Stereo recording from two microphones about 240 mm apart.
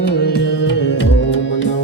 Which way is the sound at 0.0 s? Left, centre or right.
Left.